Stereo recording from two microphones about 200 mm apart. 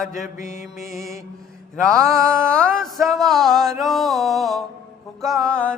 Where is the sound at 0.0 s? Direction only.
40° left (ahead or behind).